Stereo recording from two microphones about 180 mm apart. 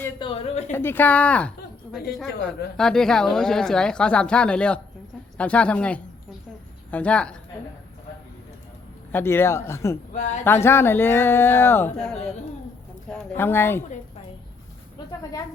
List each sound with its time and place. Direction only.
0.2 s speech: 30° left (ahead or behind)
0.7 s speech: 10° left (ahead or behind)
9.1 s speech: 15° left (ahead or behind)
10.1 s speech: 40° left (ahead or behind)
10.4 s speech: 15° left (ahead or behind)